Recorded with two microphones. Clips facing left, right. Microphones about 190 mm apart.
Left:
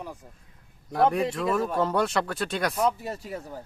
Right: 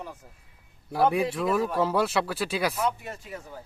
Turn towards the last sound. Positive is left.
turn(degrees=35)  # may be behind; listen again after turning